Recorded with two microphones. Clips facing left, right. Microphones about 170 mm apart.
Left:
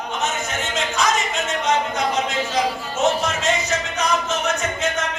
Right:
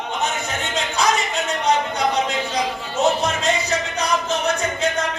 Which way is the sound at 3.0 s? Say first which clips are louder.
Right 1 dB; 35° right (ahead or behind).